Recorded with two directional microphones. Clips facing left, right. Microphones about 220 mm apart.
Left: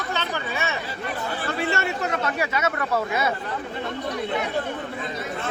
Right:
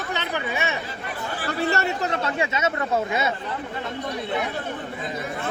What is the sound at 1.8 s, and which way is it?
Speech, 30° right (ahead or behind).